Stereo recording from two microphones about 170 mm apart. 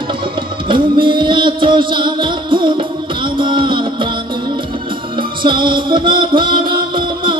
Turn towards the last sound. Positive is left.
turn(degrees=-30)  # may be behind; listen again after turning